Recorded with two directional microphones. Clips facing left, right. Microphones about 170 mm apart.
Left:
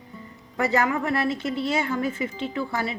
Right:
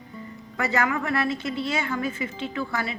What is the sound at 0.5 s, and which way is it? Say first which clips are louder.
Speech: left 2 dB; 35° left (ahead or behind).